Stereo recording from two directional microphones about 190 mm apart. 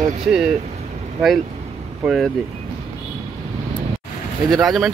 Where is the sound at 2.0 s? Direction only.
Centre (ahead or behind).